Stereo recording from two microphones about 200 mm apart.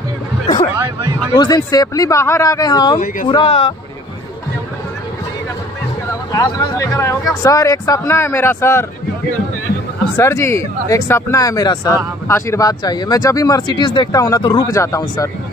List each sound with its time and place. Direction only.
1.3 s speech: 20° left (ahead or behind)
6.3 s speech: 20° left (ahead or behind)
10.1 s speech: 15° left (ahead or behind)